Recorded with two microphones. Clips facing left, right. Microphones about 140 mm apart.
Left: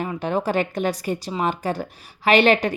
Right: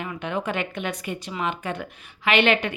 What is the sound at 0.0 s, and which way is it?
Speech, 35° left (ahead or behind).